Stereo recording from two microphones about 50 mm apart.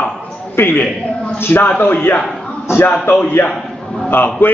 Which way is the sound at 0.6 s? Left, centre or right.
Left.